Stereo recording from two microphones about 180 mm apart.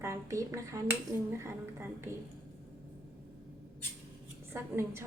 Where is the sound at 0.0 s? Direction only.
15° right (ahead or behind).